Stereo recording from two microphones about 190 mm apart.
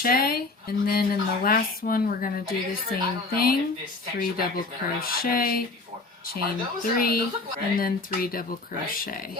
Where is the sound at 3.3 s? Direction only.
50° left (ahead or behind).